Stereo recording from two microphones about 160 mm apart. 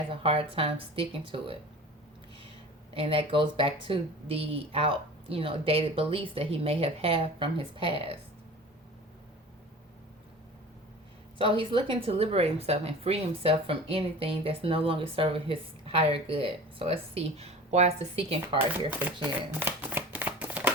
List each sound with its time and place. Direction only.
0.1 s speech: 35° right (ahead or behind)
2.9 s speech: 35° right (ahead or behind)
11.3 s speech: 35° right (ahead or behind)
19.5 s shuffling cards: 10° right (ahead or behind)